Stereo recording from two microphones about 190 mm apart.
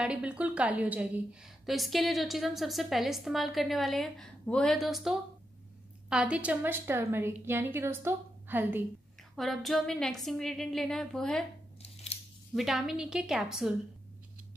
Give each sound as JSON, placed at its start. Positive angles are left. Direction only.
{"t": 0.0, "sound": "a woman's voice", "side_deg": -5}
{"t": 9.4, "sound": "a woman's voice", "side_deg": 0}
{"t": 11.8, "sound": "scissors", "side_deg": 30}
{"t": 12.5, "sound": "a woman's voice", "side_deg": 0}